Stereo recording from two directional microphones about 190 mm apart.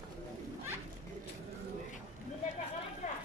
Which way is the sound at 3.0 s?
40° left (ahead or behind).